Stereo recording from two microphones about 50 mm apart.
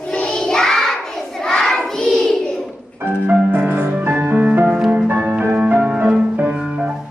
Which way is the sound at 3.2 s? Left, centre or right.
Right.